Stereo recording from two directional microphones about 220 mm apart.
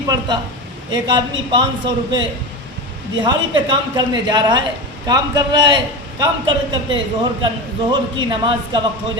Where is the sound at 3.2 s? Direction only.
20° right (ahead or behind).